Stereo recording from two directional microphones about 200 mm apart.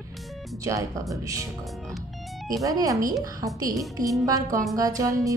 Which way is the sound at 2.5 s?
15° right (ahead or behind).